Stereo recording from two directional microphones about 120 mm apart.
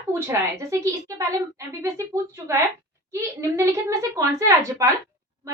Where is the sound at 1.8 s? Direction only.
25° right (ahead or behind).